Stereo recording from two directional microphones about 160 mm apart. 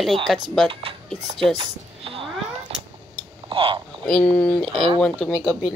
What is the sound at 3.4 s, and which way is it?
Speech, 35° right (ahead or behind).